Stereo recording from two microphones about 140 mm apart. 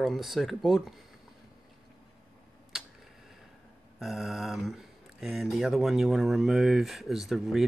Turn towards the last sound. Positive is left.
turn(degrees=0)  # may be behind; listen again after turning